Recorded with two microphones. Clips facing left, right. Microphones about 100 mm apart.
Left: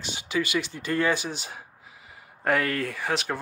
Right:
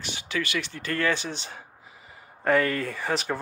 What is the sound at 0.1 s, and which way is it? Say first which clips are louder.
Speech: left 3 dB; 15° left (ahead or behind).